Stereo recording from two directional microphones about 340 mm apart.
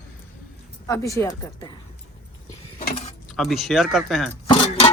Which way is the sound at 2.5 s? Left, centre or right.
Centre.